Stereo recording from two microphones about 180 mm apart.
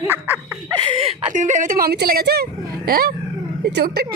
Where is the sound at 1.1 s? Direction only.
45° right (ahead or behind); by 4.1 s 60° right (ahead or behind).